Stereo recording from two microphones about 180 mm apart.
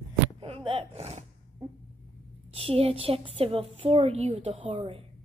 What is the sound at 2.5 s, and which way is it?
A woman's voice, 35° right (ahead or behind).